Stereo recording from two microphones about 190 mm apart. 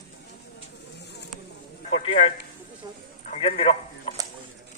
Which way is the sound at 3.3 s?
35° left (ahead or behind).